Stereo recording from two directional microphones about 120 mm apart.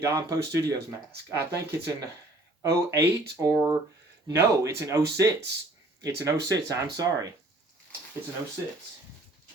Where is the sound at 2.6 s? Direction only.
25° right (ahead or behind).